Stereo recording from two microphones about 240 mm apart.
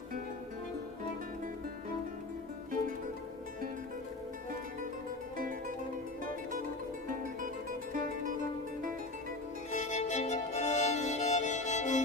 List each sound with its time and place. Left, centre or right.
5.4 s music: right
7.4 s music: right
9.7 s music: left